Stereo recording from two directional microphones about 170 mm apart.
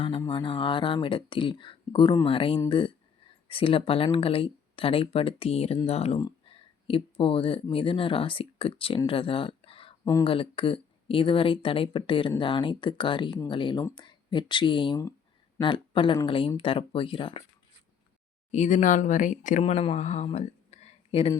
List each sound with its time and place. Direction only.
0.3 s speech: 30° left (ahead or behind)
10.0 s speech: 20° left (ahead or behind)
10.2 s speech: 30° left (ahead or behind)
18.5 s speech: 45° left (ahead or behind)